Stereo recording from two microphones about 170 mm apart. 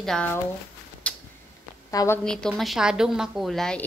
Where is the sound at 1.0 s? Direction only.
5° left (ahead or behind).